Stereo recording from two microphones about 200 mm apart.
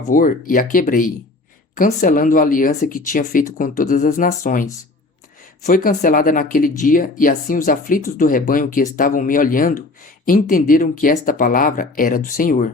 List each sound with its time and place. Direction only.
0.1 s speech: 40° left (ahead or behind)